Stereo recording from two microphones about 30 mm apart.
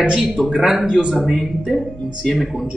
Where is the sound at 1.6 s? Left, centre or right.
Centre.